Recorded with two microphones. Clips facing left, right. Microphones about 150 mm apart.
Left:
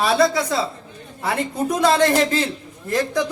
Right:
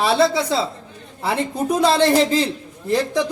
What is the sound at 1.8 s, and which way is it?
Speech, 30° right (ahead or behind).